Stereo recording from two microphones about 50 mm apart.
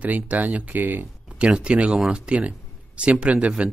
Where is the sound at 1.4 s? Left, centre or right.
Centre.